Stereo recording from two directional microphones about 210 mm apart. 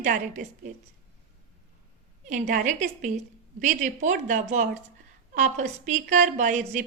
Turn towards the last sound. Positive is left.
turn(degrees=-35)  # may be behind; listen again after turning